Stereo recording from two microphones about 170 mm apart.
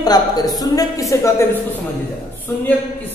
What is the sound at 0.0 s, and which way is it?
A woman's voice, 20° left (ahead or behind).